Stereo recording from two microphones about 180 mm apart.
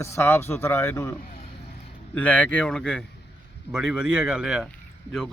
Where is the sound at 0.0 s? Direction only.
15° left (ahead or behind).